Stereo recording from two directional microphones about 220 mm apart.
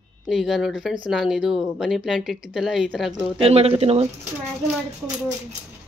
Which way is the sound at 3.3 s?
30° right (ahead or behind).